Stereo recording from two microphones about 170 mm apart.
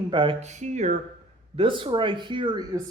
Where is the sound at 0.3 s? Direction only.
45° right (ahead or behind).